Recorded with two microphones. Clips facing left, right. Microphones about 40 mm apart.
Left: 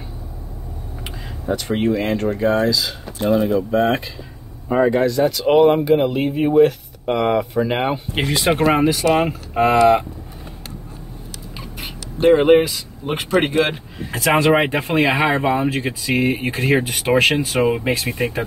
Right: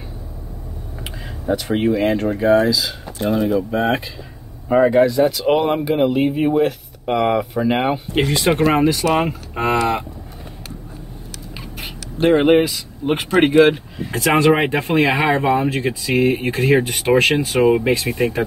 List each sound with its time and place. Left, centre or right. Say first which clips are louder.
1.0 s speech: right 1 dB; centre
12.2 s speech: left 1 dB; centre
13.7 s speech: right 7 dB; centre